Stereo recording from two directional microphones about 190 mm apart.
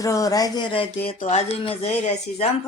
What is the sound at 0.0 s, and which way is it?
Speech, 15° left (ahead or behind).